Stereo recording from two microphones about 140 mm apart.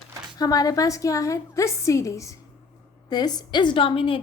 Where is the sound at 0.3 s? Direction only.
25° left (ahead or behind).